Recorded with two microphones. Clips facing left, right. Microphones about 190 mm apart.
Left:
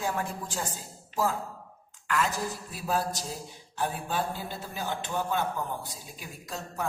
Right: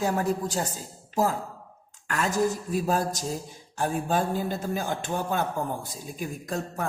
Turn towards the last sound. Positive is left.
turn(degrees=-50)  # may be behind; listen again after turning